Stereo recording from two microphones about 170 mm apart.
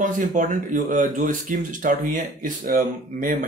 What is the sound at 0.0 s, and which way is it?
Speech, 50° right (ahead or behind).